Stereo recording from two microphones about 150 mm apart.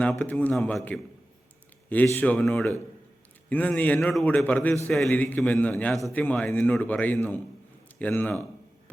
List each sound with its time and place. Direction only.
0.0 s a man's voice: 10° left (ahead or behind)